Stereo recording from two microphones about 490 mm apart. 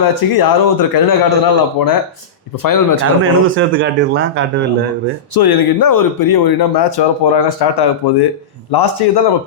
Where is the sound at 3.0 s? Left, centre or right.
Right.